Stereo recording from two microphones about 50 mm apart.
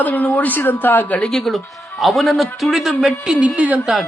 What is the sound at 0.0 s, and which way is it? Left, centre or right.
A woman's voice, left.